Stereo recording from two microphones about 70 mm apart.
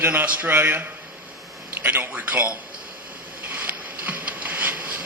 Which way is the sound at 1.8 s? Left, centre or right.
Right.